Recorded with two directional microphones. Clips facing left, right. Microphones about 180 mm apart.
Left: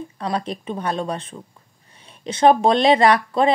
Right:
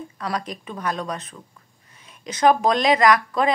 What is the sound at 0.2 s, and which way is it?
Speech, 30° left (ahead or behind).